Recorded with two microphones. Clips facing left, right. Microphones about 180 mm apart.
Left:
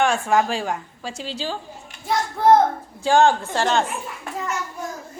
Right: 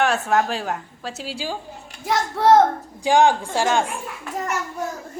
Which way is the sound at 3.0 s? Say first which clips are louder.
Even; 15° right (ahead or behind).